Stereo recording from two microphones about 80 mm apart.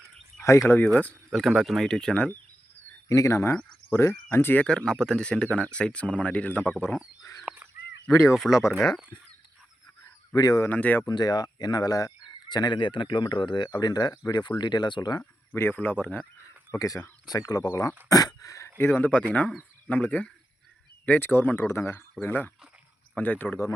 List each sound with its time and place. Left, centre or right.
0.3 s a sound: left
1.3 s speech: centre
3.1 s speech: left
4.6 s speech: centre
7.2 s fowl: left
8.2 s speech: centre
10.3 s speech: left
10.7 s speech: left
11.0 s speech: left
15.5 s speech: left
16.7 s speech: left
21.7 s speech: left
22.1 s speech: left